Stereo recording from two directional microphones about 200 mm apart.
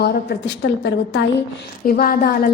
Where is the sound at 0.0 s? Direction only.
55° left (ahead or behind).